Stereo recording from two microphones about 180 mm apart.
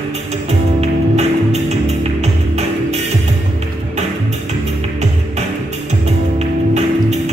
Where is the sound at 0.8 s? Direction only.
40° right (ahead or behind).